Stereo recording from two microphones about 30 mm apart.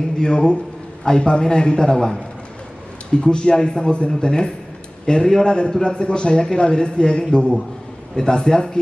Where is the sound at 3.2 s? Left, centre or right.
Left.